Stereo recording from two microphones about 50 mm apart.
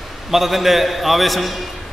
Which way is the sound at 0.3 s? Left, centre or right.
Centre.